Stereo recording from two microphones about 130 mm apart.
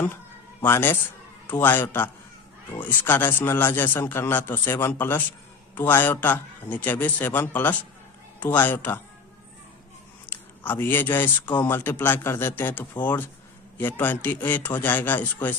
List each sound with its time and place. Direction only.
0.6 s speech: 15° left (ahead or behind)
10.2 s speech: 15° left (ahead or behind)